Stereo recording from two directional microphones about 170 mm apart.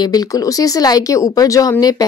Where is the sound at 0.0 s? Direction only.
20° left (ahead or behind).